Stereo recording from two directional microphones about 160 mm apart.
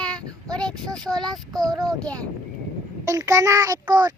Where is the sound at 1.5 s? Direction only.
25° right (ahead or behind).